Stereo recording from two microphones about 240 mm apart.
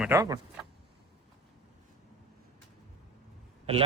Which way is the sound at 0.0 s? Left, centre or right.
Centre.